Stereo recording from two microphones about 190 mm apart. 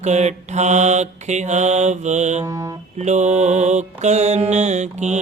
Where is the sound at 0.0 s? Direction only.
35° right (ahead or behind).